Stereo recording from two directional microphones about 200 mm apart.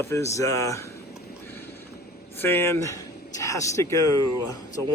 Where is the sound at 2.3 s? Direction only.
10° left (ahead or behind).